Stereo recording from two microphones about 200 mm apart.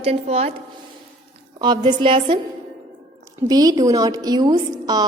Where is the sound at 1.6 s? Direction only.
20° right (ahead or behind).